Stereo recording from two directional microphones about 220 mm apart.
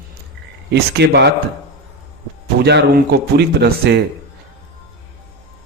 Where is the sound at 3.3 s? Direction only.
50° right (ahead or behind).